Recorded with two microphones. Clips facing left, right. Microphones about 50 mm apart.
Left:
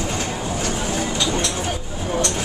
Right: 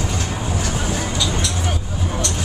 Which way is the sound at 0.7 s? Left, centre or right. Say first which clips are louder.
Even; right.